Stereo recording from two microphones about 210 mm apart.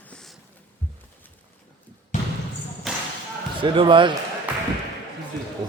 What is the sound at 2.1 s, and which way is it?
Basketball bounce, 35° left (ahead or behind).